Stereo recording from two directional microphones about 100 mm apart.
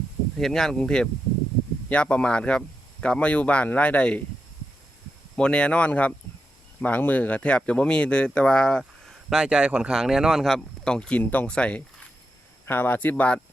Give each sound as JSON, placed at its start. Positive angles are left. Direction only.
{"t": 0.3, "sound": "speech", "side_deg": 5}
{"t": 5.4, "sound": "speech", "side_deg": 10}
{"t": 9.3, "sound": "speech", "side_deg": -5}